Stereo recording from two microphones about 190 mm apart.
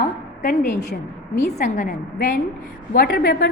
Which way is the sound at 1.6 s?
40° left (ahead or behind).